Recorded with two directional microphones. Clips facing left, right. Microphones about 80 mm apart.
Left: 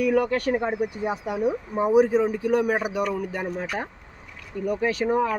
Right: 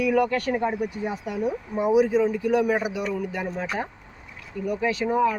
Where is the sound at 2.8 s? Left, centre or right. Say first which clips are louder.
Left 2 dB; left.